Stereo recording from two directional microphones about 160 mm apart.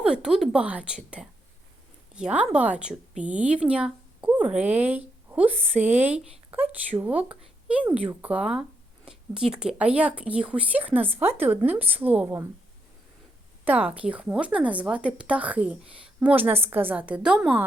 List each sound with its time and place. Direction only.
0.0 s a woman's voice: 5° right (ahead or behind)
5.5 s a woman's voice: 40° right (ahead or behind)
5.8 s a woman's voice: 10° right (ahead or behind)
13.7 s a woman's voice: 10° right (ahead or behind)